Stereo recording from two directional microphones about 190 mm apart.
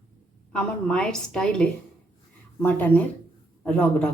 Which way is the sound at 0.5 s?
5° left (ahead or behind).